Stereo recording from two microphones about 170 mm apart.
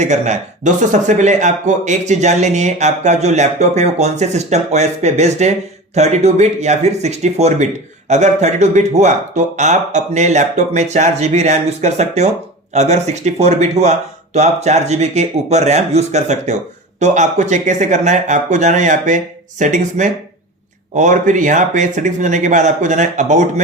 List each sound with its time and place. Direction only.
0.0 s a man's voice: 45° right (ahead or behind)